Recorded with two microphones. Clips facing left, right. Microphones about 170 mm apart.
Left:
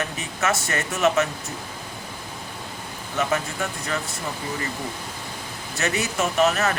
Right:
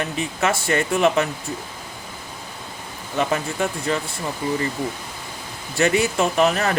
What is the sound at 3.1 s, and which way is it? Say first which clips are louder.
Speech: right 3 dB; 35° right (ahead or behind).